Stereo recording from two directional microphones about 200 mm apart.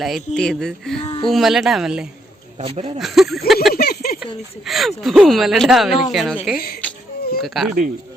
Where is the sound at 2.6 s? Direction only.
30° right (ahead or behind).